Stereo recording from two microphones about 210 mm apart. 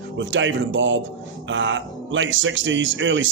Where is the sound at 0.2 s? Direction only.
60° right (ahead or behind).